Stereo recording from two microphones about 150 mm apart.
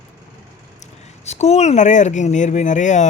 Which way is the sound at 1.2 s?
45° left (ahead or behind).